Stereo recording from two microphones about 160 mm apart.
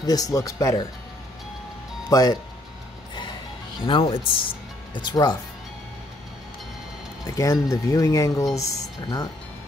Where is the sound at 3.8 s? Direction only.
35° left (ahead or behind).